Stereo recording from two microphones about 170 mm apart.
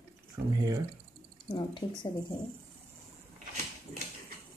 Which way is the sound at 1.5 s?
25° left (ahead or behind).